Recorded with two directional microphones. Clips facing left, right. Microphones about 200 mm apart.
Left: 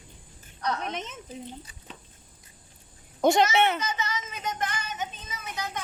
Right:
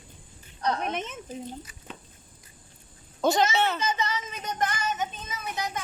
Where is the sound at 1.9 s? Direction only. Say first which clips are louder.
Right 3 dB; 55° right (ahead or behind).